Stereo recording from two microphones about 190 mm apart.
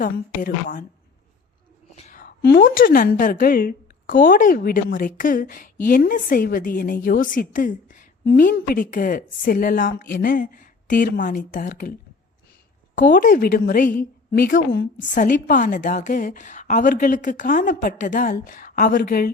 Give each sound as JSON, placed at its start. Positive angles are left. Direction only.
{"t": 0.0, "sound": "a woman's voice", "side_deg": 50}
{"t": 2.0, "sound": "a woman's voice", "side_deg": 45}
{"t": 13.0, "sound": "a woman's voice", "side_deg": 45}